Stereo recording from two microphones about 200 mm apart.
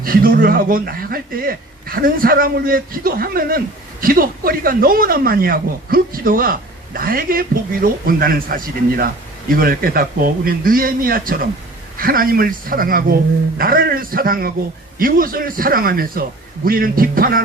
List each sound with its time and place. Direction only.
0.0 s speech: 45° right (ahead or behind)